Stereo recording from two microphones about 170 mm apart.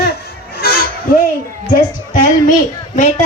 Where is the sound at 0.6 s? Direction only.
65° left (ahead or behind).